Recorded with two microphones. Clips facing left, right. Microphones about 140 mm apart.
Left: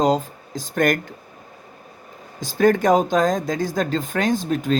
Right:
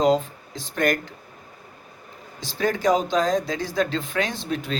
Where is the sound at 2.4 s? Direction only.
45° left (ahead or behind).